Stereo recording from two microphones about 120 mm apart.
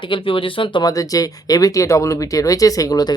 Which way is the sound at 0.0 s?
45° left (ahead or behind).